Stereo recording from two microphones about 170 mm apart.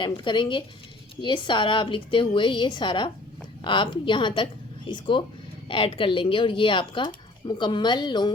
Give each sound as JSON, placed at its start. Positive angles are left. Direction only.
{"t": 0.0, "sound": "speech", "side_deg": 30}